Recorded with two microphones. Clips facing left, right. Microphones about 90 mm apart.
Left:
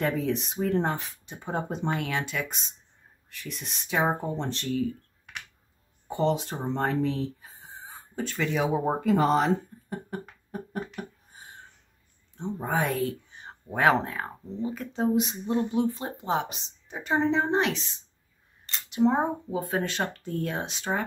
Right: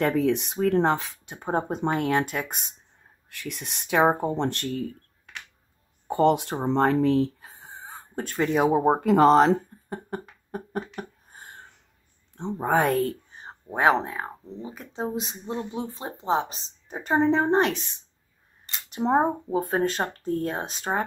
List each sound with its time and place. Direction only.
0.0 s speech: 65° right (ahead or behind)
1.4 s speech: 40° right (ahead or behind)
3.3 s speech: 65° right (ahead or behind)
6.0 s speech: 60° right (ahead or behind)
8.3 s speech: 40° right (ahead or behind); by 9.6 s 70° right (ahead or behind)
9.8 s a sound: 45° right (ahead or behind); by 11.6 s 60° right (ahead or behind)
12.4 s speech: 65° right (ahead or behind); by 13.6 s 40° right (ahead or behind)
14.2 s speech: 15° right (ahead or behind); by 17.9 s 50° right (ahead or behind)
18.9 s speech: 40° right (ahead or behind)